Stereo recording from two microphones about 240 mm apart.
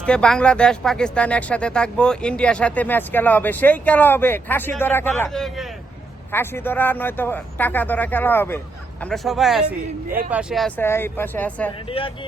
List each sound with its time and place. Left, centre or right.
0.0 s speech: centre
11.9 s speech: left